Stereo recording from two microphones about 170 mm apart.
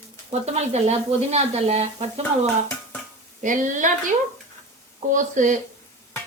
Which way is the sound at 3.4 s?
50° right (ahead or behind).